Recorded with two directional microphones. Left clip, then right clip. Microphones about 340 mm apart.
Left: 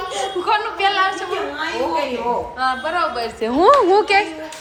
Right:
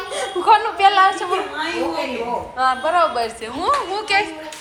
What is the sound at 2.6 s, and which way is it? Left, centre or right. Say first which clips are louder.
Speech: right 7 dB; centre.